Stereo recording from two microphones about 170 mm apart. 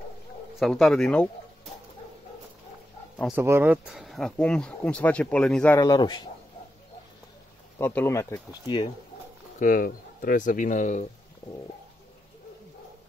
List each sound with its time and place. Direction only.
0.6 s speech: centre (ahead or behind)
3.3 s speech: 15° right (ahead or behind); by 5.8 s 5° left (ahead or behind)
5.8 s speech: 25° left (ahead or behind)
7.8 s speech: 10° left (ahead or behind)
9.6 s speech: 55° left (ahead or behind)